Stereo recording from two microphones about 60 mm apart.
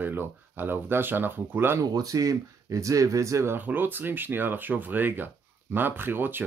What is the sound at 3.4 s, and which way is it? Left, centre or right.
Speech, right.